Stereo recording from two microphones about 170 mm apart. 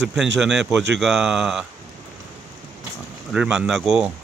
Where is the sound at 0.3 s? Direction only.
5° right (ahead or behind).